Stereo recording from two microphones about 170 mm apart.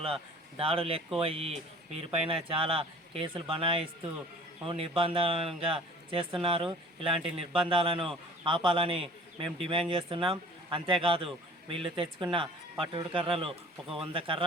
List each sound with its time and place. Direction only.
0.0 s speech: 35° right (ahead or behind)
13.8 s speech: centre (ahead or behind)
14.1 s speech: 35° right (ahead or behind)